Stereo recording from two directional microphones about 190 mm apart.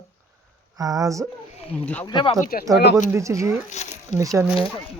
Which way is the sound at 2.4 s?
50° left (ahead or behind).